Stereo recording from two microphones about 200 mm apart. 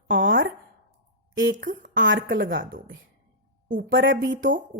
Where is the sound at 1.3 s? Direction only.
65° right (ahead or behind).